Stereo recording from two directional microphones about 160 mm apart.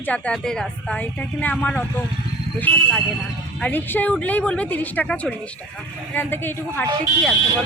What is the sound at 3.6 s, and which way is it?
A woman's voice, 10° left (ahead or behind).